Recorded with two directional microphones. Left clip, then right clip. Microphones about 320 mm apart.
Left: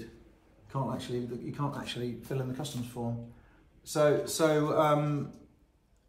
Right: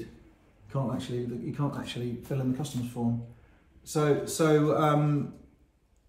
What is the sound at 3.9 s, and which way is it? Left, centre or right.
A man's voice, centre.